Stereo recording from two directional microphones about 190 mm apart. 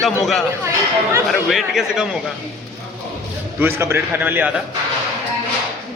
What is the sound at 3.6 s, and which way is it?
A man's voice, 10° right (ahead or behind).